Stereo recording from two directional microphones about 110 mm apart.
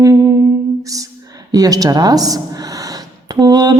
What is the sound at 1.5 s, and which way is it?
Speech, 35° right (ahead or behind).